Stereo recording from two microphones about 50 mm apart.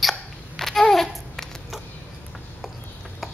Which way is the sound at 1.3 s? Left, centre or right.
Centre.